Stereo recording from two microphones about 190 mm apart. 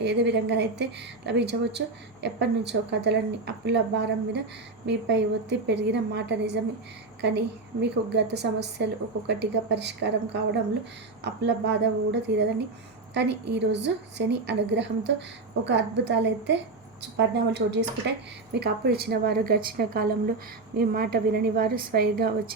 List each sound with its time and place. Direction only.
0.0 s a woman's voice: 65° right (ahead or behind)
7.8 s a woman's voice: 60° right (ahead or behind)
11.2 s a woman's voice: 65° right (ahead or behind)